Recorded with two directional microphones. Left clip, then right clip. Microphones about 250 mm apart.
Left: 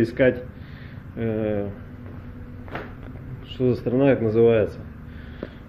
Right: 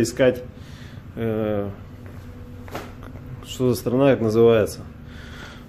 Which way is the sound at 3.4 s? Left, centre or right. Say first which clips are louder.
Right 1 dB; centre.